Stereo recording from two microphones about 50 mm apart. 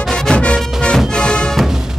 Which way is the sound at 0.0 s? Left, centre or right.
Centre.